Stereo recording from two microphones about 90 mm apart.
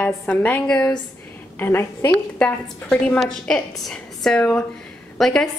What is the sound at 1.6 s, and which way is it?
Speech, 25° left (ahead or behind).